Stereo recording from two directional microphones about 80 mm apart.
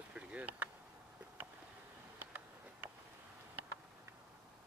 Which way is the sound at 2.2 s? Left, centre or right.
Right.